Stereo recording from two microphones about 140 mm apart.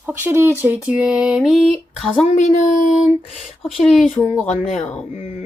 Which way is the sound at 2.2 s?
60° left (ahead or behind).